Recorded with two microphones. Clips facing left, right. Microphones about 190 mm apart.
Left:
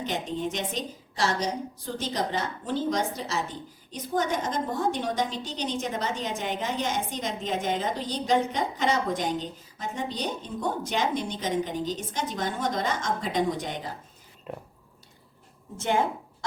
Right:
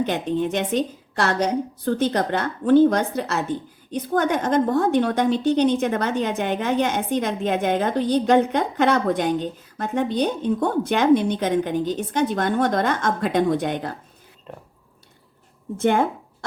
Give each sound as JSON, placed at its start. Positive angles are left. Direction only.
{"t": 0.0, "sound": "a woman's voice", "side_deg": -60}
{"t": 15.8, "sound": "speech", "side_deg": -60}